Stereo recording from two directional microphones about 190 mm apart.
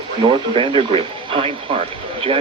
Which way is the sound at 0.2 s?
25° right (ahead or behind).